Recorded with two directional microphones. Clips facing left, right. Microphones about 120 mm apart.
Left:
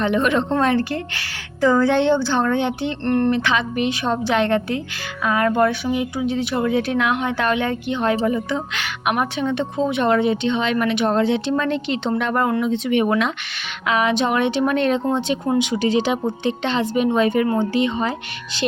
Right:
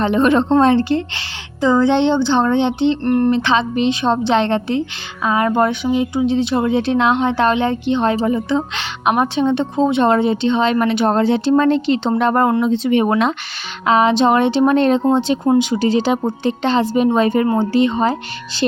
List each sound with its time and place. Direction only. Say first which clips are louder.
0.0 s speech: right 5 dB; 35° right (ahead or behind)
3.0 s speech: left 1 dB; 10° right (ahead or behind)
3.3 s speech: right 4 dB; 30° right (ahead or behind)